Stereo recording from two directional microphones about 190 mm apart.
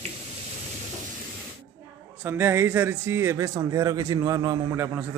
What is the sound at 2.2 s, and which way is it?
Speech, 10° right (ahead or behind).